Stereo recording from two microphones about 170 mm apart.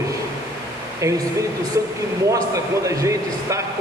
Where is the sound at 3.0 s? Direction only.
20° right (ahead or behind).